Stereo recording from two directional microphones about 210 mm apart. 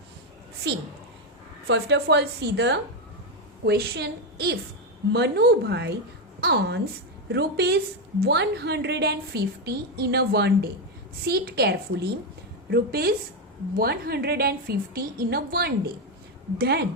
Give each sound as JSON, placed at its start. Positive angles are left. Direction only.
{"t": 1.6, "sound": "a woman's voice", "side_deg": -55}